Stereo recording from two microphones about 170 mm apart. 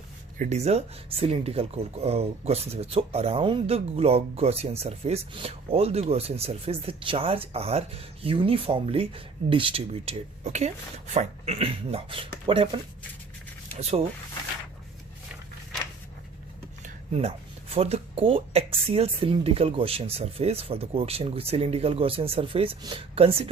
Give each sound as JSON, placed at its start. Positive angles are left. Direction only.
{"t": 0.3, "sound": "speech", "side_deg": -40}
{"t": 16.8, "sound": "a sound", "side_deg": -40}
{"t": 17.7, "sound": "speech", "side_deg": -35}